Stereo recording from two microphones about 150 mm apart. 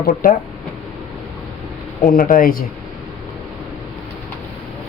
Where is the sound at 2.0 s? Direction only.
65° left (ahead or behind).